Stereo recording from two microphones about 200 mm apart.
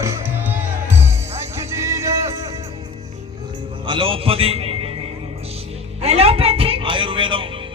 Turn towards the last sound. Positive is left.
turn(degrees=-25)  # may be behind; listen again after turning